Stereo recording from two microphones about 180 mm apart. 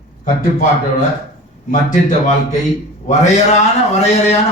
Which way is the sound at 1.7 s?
45° left (ahead or behind).